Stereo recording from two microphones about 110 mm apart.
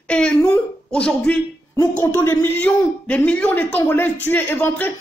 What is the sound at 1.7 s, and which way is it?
A man's voice, 30° left (ahead or behind).